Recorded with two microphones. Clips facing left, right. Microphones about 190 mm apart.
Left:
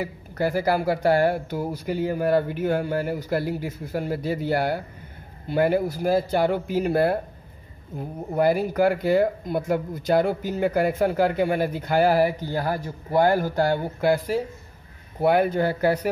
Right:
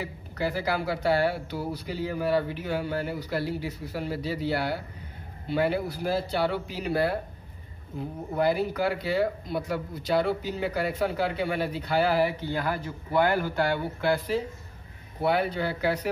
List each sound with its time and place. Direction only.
0.0 s speech: 50° left (ahead or behind)
8.3 s speech: 50° left (ahead or behind)